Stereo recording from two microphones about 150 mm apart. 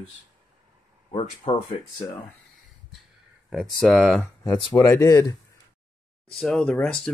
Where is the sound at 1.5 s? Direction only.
40° left (ahead or behind).